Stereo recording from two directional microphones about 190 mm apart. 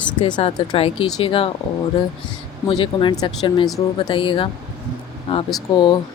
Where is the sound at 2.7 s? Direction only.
25° left (ahead or behind).